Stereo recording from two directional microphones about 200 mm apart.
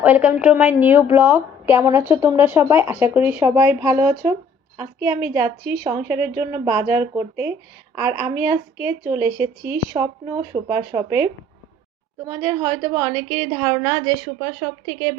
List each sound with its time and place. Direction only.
0.0 s a woman's voice: 5° right (ahead or behind)
12.4 s a woman's voice: 20° right (ahead or behind)